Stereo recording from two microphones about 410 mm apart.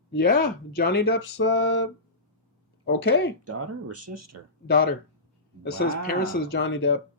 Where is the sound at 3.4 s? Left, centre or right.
Right.